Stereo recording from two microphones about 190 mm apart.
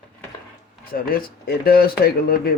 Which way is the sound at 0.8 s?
50° left (ahead or behind).